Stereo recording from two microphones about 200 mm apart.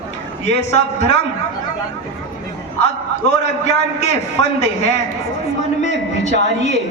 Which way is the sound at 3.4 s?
35° left (ahead or behind).